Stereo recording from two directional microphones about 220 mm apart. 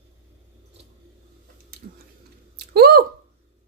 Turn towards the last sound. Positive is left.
turn(degrees=-45)  # may be behind; listen again after turning